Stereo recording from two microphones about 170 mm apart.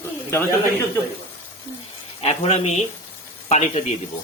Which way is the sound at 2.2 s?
40° left (ahead or behind).